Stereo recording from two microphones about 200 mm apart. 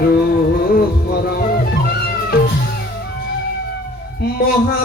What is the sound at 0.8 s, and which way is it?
Music, 50° left (ahead or behind).